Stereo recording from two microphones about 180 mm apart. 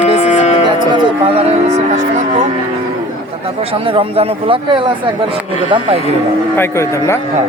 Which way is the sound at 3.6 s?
30° right (ahead or behind).